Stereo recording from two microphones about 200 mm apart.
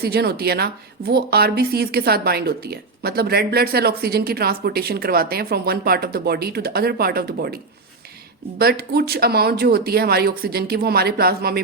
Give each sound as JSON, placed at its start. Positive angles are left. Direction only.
{"t": 0.0, "sound": "a woman's voice", "side_deg": -50}